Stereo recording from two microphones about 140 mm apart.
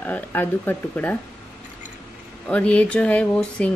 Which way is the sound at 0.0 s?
15° left (ahead or behind).